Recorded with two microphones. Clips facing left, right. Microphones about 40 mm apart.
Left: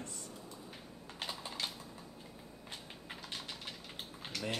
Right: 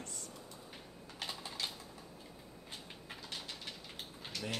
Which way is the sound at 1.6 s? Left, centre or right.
Centre.